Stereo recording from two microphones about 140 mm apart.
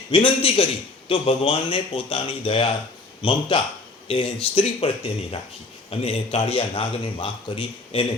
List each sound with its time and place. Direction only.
0.1 s a man's voice: 40° left (ahead or behind)
5.9 s a man's voice: 45° left (ahead or behind)